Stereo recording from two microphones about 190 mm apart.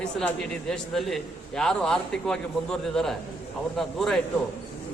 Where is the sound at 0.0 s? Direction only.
5° left (ahead or behind).